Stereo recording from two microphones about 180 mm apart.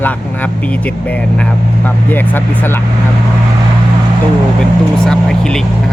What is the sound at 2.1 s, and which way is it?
Speech, 10° left (ahead or behind).